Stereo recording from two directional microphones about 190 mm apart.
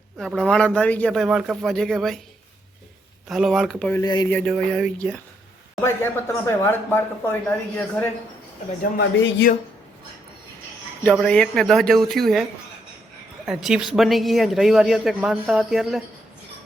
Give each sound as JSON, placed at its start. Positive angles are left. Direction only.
{"t": 0.2, "sound": "speech", "side_deg": 0}
{"t": 3.2, "sound": "speech", "side_deg": 0}
{"t": 4.0, "sound": "speech", "side_deg": 20}
{"t": 4.3, "sound": "speech", "side_deg": 0}
{"t": 5.8, "sound": "speech", "side_deg": 15}
{"t": 8.8, "sound": "speech", "side_deg": 60}
{"t": 11.1, "sound": "speech", "side_deg": 5}